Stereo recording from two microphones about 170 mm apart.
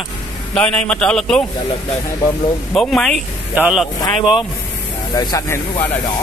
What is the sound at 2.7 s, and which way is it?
A man's voice, 5° left (ahead or behind).